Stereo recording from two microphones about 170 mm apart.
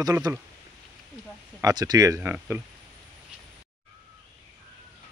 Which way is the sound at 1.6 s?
20° right (ahead or behind).